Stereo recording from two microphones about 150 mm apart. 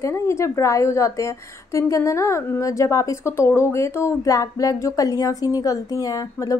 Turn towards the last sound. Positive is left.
turn(degrees=25)  # may be behind; listen again after turning